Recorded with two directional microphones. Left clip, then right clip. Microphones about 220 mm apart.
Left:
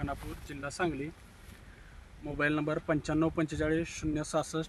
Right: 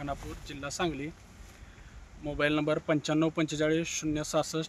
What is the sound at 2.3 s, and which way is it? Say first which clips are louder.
Speech: right 3 dB; 30° right (ahead or behind).